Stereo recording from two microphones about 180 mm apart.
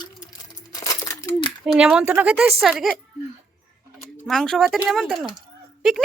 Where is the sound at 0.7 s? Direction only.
20° left (ahead or behind).